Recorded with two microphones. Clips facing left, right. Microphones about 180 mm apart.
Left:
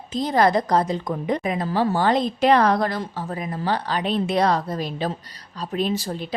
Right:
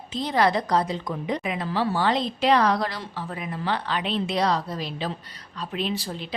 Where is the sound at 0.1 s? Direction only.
45° left (ahead or behind).